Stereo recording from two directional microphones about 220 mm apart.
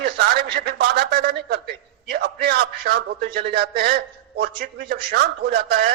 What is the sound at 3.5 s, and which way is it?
A man's voice, 45° right (ahead or behind).